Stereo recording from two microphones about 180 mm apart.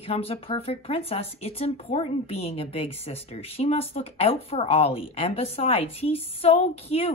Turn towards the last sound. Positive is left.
turn(degrees=35)  # may be behind; listen again after turning